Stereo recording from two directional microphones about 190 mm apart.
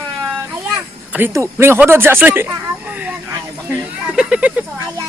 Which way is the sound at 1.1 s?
15° right (ahead or behind).